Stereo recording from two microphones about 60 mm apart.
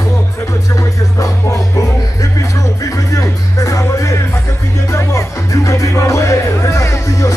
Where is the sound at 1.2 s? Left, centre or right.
Left.